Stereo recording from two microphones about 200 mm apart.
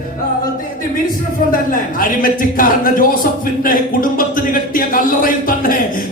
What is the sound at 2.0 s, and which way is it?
A man's voice, 45° left (ahead or behind).